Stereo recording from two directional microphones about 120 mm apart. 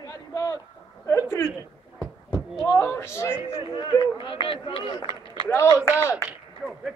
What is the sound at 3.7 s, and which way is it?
Speech, 40° left (ahead or behind).